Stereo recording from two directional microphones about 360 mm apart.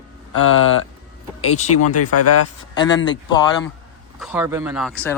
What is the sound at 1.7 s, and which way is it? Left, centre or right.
Speech, left.